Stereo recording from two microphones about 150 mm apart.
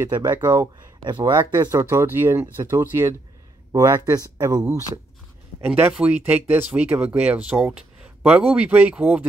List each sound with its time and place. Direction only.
0.0 s speech: 20° right (ahead or behind)